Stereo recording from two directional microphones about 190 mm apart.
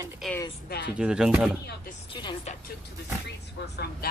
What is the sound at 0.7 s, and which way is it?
Speech, 55° left (ahead or behind).